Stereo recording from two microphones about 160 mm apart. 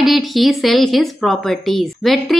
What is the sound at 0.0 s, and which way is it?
A woman's voice, centre (ahead or behind).